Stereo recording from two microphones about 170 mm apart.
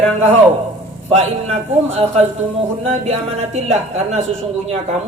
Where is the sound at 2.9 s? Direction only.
40° right (ahead or behind).